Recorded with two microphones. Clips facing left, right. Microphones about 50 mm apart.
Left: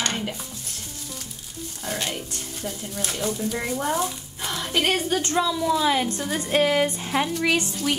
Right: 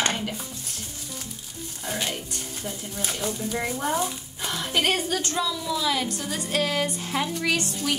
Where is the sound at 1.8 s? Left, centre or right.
Centre.